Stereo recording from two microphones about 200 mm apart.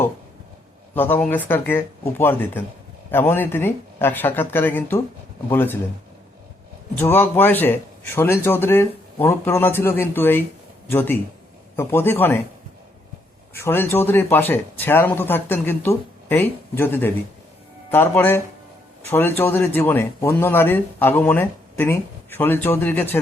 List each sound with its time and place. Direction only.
0.9 s speech: 10° left (ahead or behind)
7.0 s speech: 10° left (ahead or behind)
13.5 s speech: 10° left (ahead or behind)